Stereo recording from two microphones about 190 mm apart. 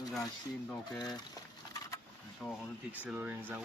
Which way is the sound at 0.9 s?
20° left (ahead or behind).